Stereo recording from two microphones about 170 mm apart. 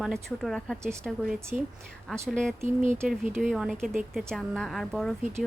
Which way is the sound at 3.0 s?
5° right (ahead or behind).